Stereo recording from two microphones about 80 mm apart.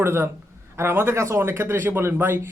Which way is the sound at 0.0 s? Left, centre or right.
Right.